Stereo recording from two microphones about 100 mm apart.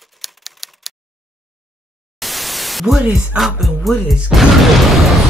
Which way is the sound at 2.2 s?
Centre (ahead or behind).